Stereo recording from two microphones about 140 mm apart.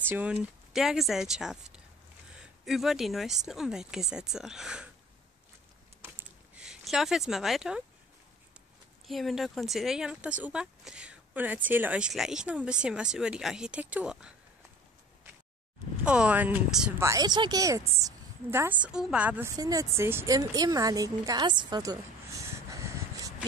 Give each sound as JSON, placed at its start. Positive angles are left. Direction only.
{"t": 0.1, "sound": "speech", "side_deg": -10}
{"t": 6.0, "sound": "a sound", "side_deg": -10}
{"t": 9.0, "sound": "speech", "side_deg": 0}
{"t": 16.1, "sound": "speech", "side_deg": -10}
{"t": 17.0, "sound": "a woman's voice", "side_deg": -25}
{"t": 19.5, "sound": "a woman's voice", "side_deg": -25}